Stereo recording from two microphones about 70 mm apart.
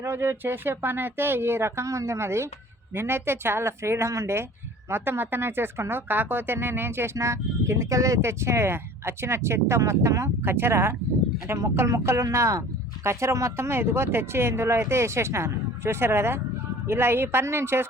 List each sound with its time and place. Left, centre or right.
0.0 s a woman's voice: right